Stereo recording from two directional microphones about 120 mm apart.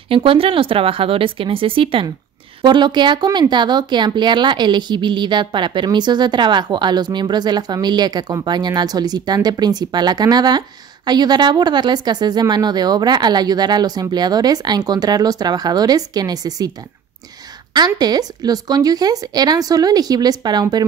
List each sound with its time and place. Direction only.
0.1 s a woman's voice: 50° right (ahead or behind); by 16.7 s 30° right (ahead or behind)
17.7 s a woman's voice: 35° right (ahead or behind)